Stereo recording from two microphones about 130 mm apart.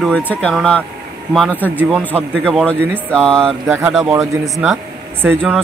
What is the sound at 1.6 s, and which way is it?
Speech, 15° left (ahead or behind).